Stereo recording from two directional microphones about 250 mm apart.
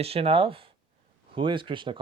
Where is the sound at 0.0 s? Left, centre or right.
Right.